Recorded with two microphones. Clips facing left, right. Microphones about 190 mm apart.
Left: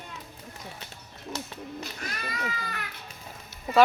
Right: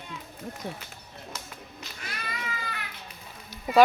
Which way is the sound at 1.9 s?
45° left (ahead or behind).